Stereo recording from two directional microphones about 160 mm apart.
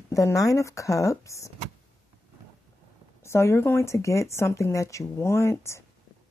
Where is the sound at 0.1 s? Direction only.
20° left (ahead or behind).